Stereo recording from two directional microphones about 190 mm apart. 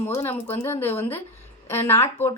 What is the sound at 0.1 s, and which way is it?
Speech, 10° left (ahead or behind).